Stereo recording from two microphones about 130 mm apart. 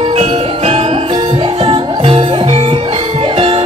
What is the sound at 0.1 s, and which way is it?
Jingle bell, 55° right (ahead or behind).